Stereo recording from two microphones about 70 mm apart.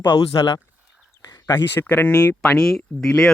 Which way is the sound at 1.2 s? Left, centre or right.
Left.